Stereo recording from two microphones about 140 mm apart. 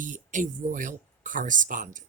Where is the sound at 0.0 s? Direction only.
65° right (ahead or behind).